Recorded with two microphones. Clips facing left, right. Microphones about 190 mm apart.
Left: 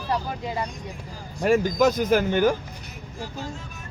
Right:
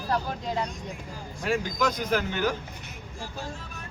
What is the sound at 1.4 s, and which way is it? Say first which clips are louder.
Speech: left 8 dB; 45° left (ahead or behind).